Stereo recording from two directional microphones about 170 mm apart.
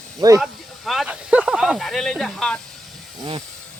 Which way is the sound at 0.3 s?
Centre (ahead or behind).